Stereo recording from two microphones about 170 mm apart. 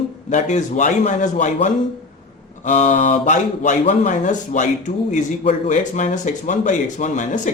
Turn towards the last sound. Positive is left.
turn(degrees=45)  # may be behind; listen again after turning